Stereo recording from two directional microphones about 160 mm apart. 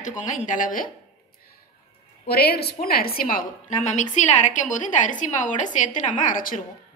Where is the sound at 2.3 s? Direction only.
75° left (ahead or behind).